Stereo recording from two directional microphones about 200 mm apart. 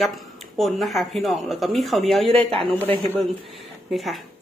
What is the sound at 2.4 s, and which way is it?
Speech, 25° right (ahead or behind).